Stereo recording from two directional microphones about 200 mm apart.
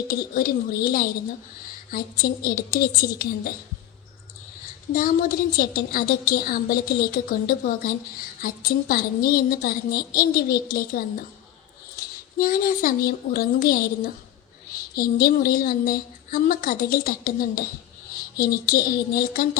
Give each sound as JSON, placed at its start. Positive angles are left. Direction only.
{"t": 0.1, "sound": "a woman's voice", "side_deg": 45}
{"t": 4.9, "sound": "a woman's voice", "side_deg": 45}
{"t": 12.4, "sound": "a woman's voice", "side_deg": 45}